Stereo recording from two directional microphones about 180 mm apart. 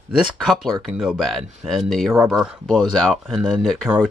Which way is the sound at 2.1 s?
10° right (ahead or behind).